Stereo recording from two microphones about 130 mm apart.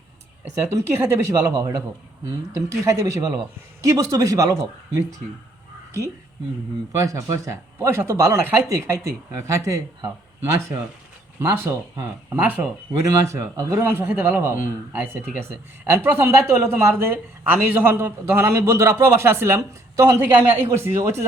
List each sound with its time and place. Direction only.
0.7 s a man's voice: 20° right (ahead or behind)
7.0 s a man's voice: 25° right (ahead or behind)
11.3 s a man's voice: 20° right (ahead or behind)